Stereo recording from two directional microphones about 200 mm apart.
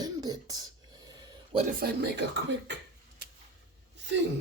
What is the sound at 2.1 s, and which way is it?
Speech, 60° right (ahead or behind).